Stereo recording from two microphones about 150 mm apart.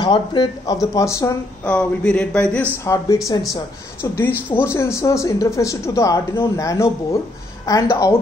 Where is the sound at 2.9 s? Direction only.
20° left (ahead or behind).